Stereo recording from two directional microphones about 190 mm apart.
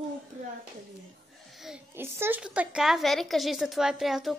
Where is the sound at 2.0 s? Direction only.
10° right (ahead or behind).